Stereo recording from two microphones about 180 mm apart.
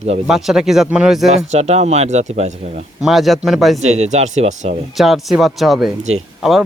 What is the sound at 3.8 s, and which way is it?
Speech, 40° right (ahead or behind).